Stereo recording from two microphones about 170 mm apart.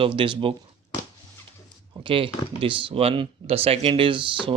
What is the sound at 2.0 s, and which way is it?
Speech, 30° right (ahead or behind).